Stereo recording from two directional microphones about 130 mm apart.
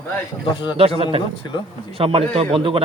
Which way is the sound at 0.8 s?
45° right (ahead or behind).